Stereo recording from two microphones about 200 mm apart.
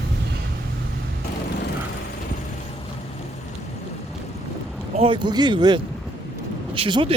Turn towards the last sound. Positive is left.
turn(degrees=-25)  # may be behind; listen again after turning